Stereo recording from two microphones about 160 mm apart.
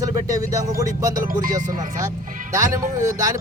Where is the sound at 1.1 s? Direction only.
60° right (ahead or behind).